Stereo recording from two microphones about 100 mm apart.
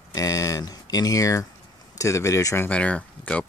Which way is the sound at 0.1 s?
35° left (ahead or behind).